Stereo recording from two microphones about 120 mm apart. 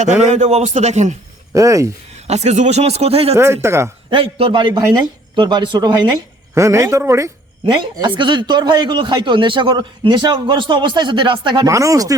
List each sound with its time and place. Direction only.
0.3 s a man's voice: 65° right (ahead or behind)
1.5 s speech: 30° right (ahead or behind)
2.2 s speech: 65° right (ahead or behind)
3.3 s speech: 20° right (ahead or behind)
4.1 s a man's voice: 50° right (ahead or behind)
6.5 s speech: 25° right (ahead or behind)
7.6 s a man's voice: 40° right (ahead or behind)
11.7 s speech: 25° right (ahead or behind)